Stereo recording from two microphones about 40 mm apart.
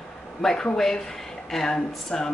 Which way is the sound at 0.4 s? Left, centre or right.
Centre.